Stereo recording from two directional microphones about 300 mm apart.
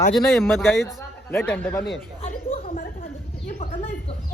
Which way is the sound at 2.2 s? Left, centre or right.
Left.